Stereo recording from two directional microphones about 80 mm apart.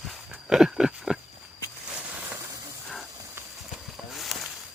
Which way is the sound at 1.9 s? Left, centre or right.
Centre.